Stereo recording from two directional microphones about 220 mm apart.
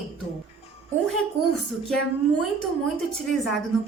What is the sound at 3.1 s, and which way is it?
Speech, centre (ahead or behind).